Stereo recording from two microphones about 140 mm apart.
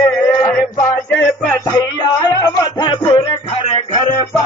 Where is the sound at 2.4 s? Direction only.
30° left (ahead or behind).